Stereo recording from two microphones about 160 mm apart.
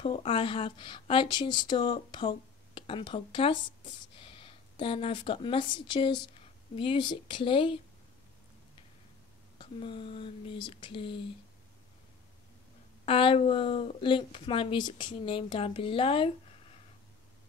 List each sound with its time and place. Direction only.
0.0 s speech: 35° left (ahead or behind)
9.6 s speech: 30° left (ahead or behind)
13.0 s speech: 35° left (ahead or behind)